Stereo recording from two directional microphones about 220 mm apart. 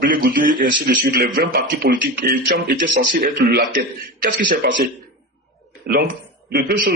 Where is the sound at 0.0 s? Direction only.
40° right (ahead or behind).